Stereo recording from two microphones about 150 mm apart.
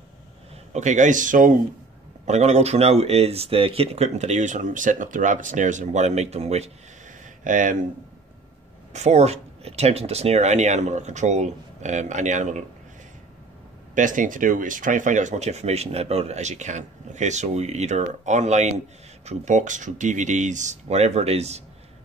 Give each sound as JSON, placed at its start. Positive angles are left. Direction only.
{"t": 0.7, "sound": "speech", "side_deg": -55}
{"t": 2.2, "sound": "speech", "side_deg": -50}
{"t": 7.4, "sound": "speech", "side_deg": -60}
{"t": 8.9, "sound": "speech", "side_deg": -50}
{"t": 13.9, "sound": "speech", "side_deg": -60}